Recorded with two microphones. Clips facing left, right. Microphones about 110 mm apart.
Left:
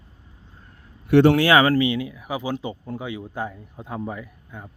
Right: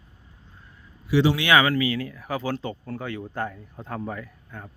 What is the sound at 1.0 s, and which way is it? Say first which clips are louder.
Speech: left 6 dB; 55° left (ahead or behind).